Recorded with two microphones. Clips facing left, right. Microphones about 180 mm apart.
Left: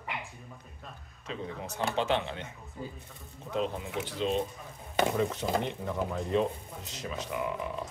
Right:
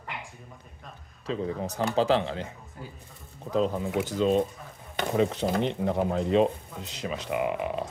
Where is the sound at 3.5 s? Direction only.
40° right (ahead or behind).